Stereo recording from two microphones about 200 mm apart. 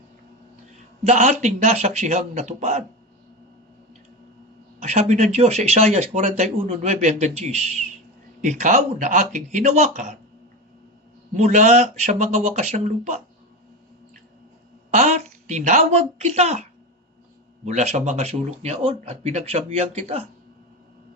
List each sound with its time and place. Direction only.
1.0 s speech: 35° right (ahead or behind)
4.8 s speech: 35° right (ahead or behind)
11.3 s speech: 35° right (ahead or behind)
14.8 s speech: 35° right (ahead or behind)
17.7 s speech: 35° right (ahead or behind)